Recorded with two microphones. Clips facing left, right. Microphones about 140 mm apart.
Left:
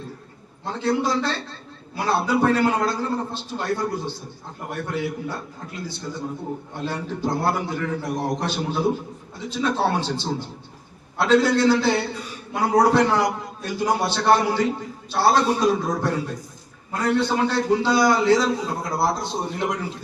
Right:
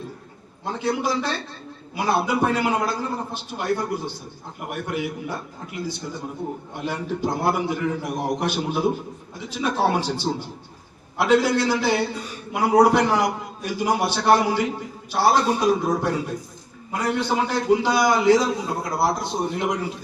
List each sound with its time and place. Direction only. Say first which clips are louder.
0.6 s a man's voice: left 1 dB; 15° right (ahead or behind)
6.7 s a man's voice: right 2 dB; 15° right (ahead or behind)